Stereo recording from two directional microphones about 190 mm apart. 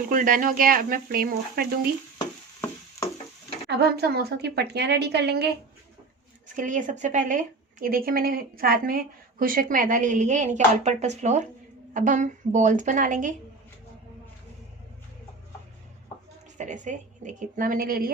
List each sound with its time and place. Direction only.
0.1 s speech: 45° right (ahead or behind)
3.7 s a woman's voice: 60° right (ahead or behind)
6.6 s a woman's voice: 40° right (ahead or behind)
16.6 s a woman's voice: 40° right (ahead or behind)